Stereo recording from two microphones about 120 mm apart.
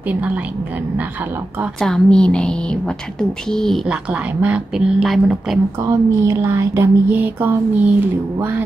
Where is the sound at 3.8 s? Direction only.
10° right (ahead or behind).